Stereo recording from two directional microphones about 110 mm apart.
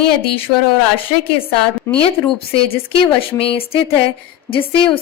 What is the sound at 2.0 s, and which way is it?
A woman's voice, 60° left (ahead or behind).